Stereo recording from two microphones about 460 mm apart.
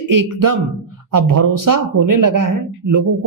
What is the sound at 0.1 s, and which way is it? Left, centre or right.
Speech, right.